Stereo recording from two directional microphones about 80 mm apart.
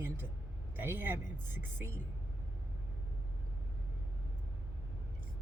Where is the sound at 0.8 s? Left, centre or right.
Right.